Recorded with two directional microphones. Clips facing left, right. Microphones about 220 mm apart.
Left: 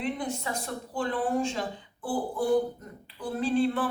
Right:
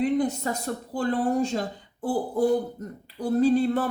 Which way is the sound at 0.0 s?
40° right (ahead or behind).